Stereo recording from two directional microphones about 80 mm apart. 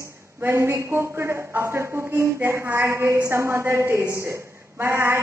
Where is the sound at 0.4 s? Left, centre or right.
Right.